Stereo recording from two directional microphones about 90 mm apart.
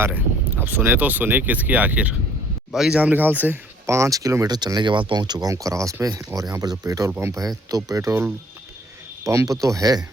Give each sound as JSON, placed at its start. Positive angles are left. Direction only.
{"t": 0.6, "sound": "speech", "side_deg": -20}
{"t": 2.7, "sound": "speech", "side_deg": -5}
{"t": 3.0, "sound": "speech", "side_deg": -20}
{"t": 3.8, "sound": "speech", "side_deg": -35}
{"t": 4.4, "sound": "speech", "side_deg": -50}
{"t": 7.4, "sound": "speech", "side_deg": -40}